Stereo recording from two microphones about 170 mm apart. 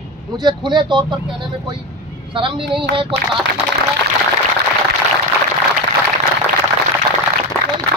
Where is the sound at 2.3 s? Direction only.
30° right (ahead or behind).